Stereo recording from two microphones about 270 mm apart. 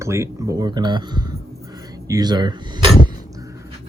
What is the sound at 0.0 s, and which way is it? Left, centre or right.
Speech, centre.